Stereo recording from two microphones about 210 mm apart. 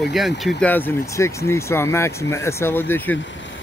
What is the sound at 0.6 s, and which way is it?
Speech, 10° left (ahead or behind).